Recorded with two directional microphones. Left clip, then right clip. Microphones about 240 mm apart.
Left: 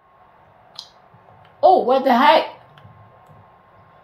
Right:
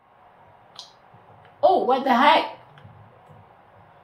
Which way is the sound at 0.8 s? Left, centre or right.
Left.